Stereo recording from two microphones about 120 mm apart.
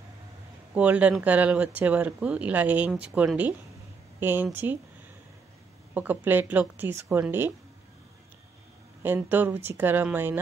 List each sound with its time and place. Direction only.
0.7 s speech: 10° right (ahead or behind)
5.9 s speech: 15° right (ahead or behind)
9.0 s speech: 15° right (ahead or behind)